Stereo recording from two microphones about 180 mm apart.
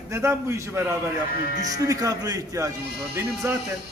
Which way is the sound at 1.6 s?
20° right (ahead or behind).